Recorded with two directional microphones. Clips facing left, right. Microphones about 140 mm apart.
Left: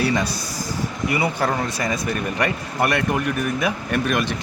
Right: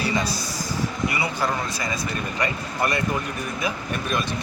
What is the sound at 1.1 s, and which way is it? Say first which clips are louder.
Speech: left 4 dB; 55° left (ahead or behind).